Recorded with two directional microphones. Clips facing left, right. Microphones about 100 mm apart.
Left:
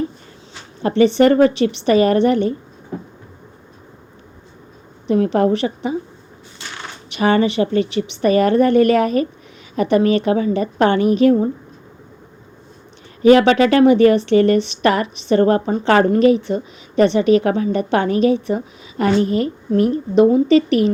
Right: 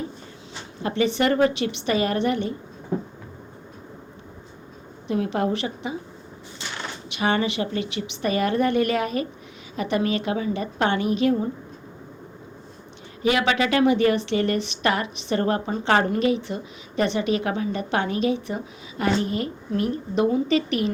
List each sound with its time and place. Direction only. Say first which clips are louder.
0.8 s a woman's voice: left 9 dB; 35° left (ahead or behind)
5.0 s a woman's voice: left 8 dB; 35° left (ahead or behind)
7.1 s a woman's voice: left 8 dB; 40° left (ahead or behind)
13.2 s a woman's voice: left 10 dB; 40° left (ahead or behind)